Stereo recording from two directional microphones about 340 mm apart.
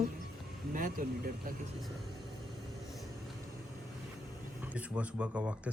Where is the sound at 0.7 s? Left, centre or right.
Right.